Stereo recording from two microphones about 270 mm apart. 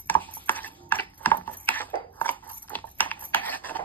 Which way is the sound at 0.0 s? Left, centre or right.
Centre.